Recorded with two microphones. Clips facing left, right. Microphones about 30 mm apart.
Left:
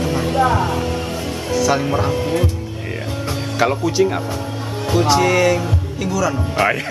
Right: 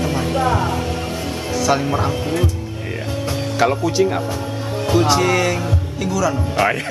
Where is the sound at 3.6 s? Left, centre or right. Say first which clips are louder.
Even; centre.